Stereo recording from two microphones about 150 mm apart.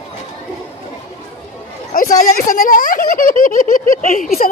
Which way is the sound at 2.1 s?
60° left (ahead or behind).